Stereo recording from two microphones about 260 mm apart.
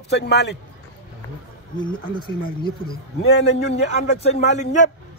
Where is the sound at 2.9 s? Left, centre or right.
Left.